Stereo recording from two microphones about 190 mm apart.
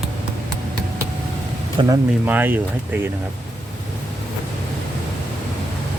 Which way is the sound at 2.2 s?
10° right (ahead or behind).